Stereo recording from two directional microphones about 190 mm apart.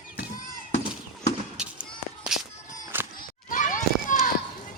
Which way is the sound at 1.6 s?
5° right (ahead or behind).